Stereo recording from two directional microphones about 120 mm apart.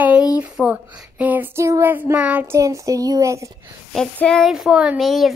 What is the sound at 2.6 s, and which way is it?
Speech, 25° right (ahead or behind).